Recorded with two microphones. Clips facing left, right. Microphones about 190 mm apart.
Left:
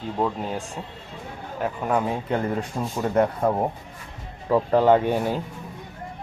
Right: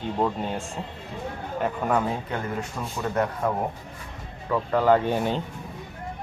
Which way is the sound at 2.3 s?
35° left (ahead or behind).